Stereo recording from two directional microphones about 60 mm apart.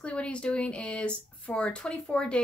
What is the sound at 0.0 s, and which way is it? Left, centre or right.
A woman's voice, centre.